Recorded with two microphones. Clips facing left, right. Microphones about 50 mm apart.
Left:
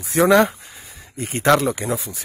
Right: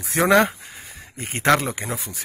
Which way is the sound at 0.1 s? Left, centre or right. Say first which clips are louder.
Left 2 dB; right.